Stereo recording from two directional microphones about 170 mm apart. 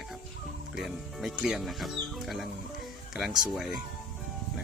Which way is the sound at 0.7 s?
Centre (ahead or behind).